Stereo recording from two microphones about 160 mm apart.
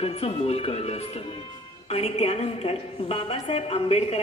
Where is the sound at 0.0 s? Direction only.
40° left (ahead or behind).